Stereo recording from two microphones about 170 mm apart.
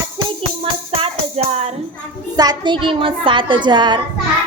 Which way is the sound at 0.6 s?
35° right (ahead or behind).